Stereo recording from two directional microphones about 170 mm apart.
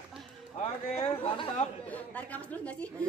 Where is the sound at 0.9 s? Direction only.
35° left (ahead or behind).